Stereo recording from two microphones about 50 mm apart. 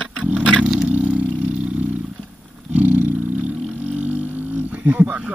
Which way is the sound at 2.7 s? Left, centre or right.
Right.